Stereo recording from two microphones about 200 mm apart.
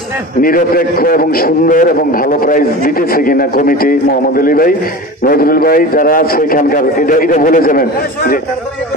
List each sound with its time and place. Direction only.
0.4 s a man's voice: 45° left (ahead or behind)